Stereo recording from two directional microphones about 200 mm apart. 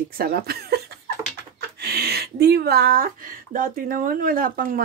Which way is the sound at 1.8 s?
55° right (ahead or behind).